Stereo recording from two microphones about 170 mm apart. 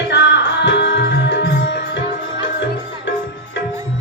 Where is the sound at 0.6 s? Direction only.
90° left.